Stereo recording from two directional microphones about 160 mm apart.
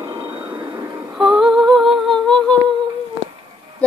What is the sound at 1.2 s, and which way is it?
Humming, centre (ahead or behind).